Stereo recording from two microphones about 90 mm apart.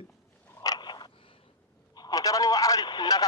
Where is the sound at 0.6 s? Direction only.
50° left (ahead or behind).